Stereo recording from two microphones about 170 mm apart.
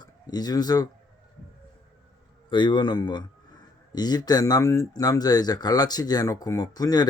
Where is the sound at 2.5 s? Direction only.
30° left (ahead or behind).